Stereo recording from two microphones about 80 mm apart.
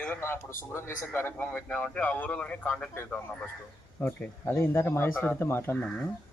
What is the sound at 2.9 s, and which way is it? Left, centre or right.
A man's voice, left.